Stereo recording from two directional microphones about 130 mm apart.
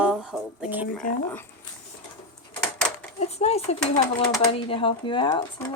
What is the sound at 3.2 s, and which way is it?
A child's voice, 55° left (ahead or behind).